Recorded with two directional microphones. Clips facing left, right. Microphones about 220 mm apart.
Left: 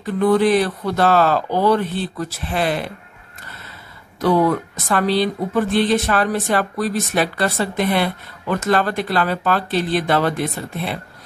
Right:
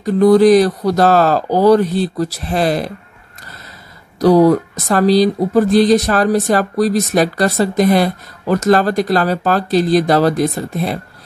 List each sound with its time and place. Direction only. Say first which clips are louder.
0.0 s speech: right 7 dB; 40° right (ahead or behind)
4.2 s speech: right 7 dB; 40° right (ahead or behind)